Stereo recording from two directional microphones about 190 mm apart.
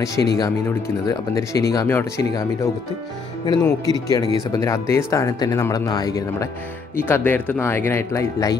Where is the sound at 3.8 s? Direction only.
20° left (ahead or behind).